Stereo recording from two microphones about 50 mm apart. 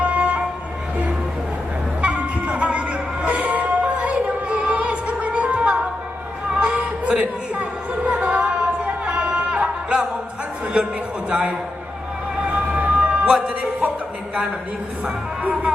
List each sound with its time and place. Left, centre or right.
0.0 s music: right
2.0 s music: right
11.3 s a sound: right
12.5 s emergency vehicle: right
13.5 s music: right